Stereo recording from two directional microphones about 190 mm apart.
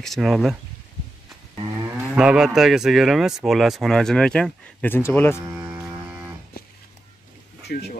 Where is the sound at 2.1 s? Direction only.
5° right (ahead or behind); by 5.4 s 10° left (ahead or behind).